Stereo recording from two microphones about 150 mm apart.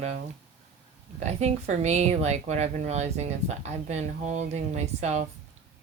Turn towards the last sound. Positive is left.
turn(degrees=-50)  # may be behind; listen again after turning